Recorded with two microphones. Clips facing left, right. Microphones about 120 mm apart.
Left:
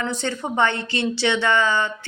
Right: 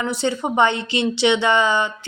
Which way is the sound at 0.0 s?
15° right (ahead or behind).